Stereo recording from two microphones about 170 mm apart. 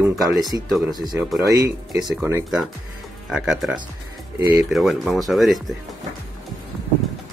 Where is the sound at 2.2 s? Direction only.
15° right (ahead or behind).